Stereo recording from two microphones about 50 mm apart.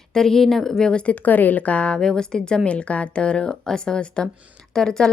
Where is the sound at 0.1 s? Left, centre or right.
Centre.